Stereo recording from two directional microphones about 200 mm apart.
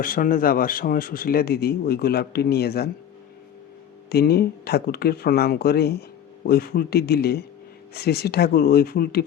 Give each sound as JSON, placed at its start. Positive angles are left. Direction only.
{"t": 0.0, "sound": "speech", "side_deg": 45}
{"t": 4.1, "sound": "speech", "side_deg": 50}